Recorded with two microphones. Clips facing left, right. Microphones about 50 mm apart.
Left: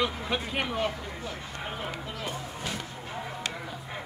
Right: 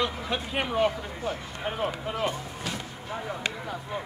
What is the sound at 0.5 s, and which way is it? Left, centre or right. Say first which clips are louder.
Speech: right 7 dB; centre.